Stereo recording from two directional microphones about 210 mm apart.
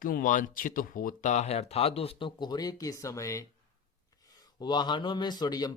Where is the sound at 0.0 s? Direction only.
40° left (ahead or behind); by 3.4 s 15° left (ahead or behind).